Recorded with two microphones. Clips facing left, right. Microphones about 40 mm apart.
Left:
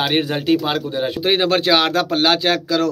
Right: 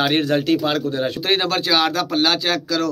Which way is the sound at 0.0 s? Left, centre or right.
Centre.